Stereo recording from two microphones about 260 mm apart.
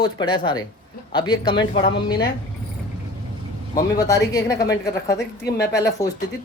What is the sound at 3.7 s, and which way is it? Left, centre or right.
Speech, centre.